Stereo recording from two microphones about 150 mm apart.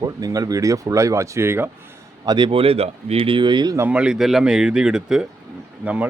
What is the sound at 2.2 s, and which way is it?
Speech, 30° right (ahead or behind).